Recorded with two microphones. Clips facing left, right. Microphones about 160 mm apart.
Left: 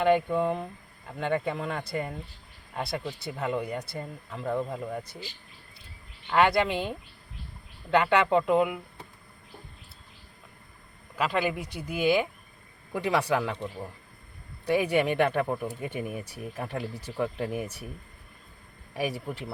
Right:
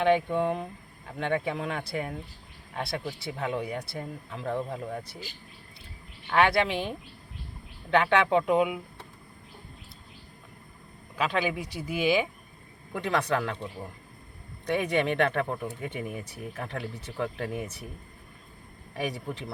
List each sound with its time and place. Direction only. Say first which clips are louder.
0.0 s speech: even; centre (ahead or behind)
6.2 s speech: left 1 dB; centre (ahead or behind)
11.2 s speech: left 1 dB; centre (ahead or behind)
12.9 s speech: left 1 dB; 10° left (ahead or behind)
14.7 s speech: left 2 dB; 10° left (ahead or behind)
18.9 s speech: left 1 dB; 5° left (ahead or behind)